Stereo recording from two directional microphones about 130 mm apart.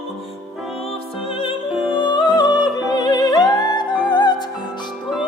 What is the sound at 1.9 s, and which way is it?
Music, 35° left (ahead or behind).